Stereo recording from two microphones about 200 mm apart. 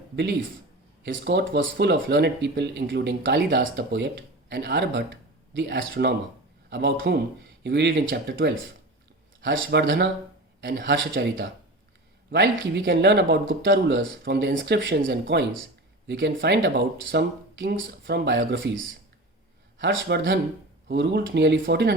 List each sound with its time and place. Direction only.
1.0 s speech: 60° right (ahead or behind)
19.8 s speech: 60° right (ahead or behind)